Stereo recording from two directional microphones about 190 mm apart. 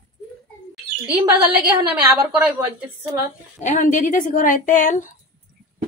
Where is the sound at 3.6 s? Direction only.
40° left (ahead or behind).